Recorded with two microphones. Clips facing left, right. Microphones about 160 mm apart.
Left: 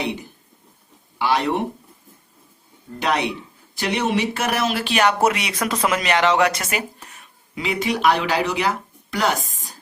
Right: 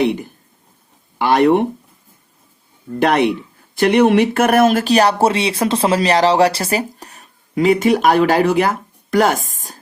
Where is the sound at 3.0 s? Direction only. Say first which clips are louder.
Right 8 dB; 55° right (ahead or behind).